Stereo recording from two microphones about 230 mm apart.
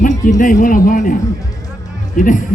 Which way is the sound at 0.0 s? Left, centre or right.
Left.